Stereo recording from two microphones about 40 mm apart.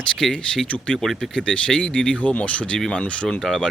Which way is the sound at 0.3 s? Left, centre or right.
Centre.